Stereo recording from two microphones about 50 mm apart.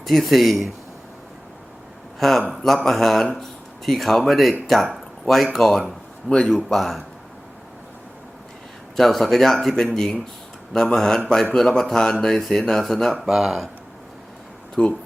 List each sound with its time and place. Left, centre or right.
0.0 s speech: centre
2.1 s speech: centre
6.2 s speech: centre
6.7 s speech: centre
9.0 s speech: centre
13.2 s speech: centre
14.8 s speech: centre